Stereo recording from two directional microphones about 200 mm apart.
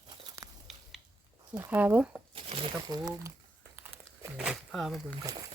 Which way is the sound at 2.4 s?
30° right (ahead or behind).